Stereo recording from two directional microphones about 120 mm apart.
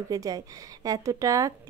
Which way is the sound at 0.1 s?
30° right (ahead or behind).